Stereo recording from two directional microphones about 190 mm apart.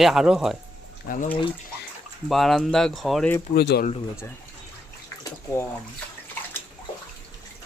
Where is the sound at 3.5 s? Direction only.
55° left (ahead or behind).